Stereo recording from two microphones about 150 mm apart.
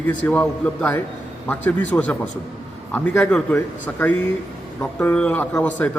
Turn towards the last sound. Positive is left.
turn(degrees=10)  # may be behind; listen again after turning